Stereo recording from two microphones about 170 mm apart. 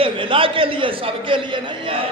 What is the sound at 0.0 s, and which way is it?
A man's voice, 30° right (ahead or behind).